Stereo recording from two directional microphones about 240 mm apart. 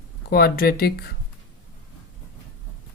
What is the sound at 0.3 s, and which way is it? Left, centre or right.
Speech, left.